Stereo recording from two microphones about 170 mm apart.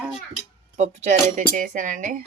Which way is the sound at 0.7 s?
45° right (ahead or behind).